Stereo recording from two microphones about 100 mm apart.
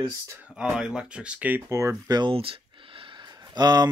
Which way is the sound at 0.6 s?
10° right (ahead or behind).